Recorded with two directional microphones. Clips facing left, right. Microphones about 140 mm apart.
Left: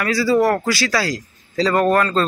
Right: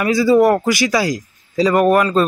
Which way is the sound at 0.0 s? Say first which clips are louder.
Right 4 dB; 20° right (ahead or behind).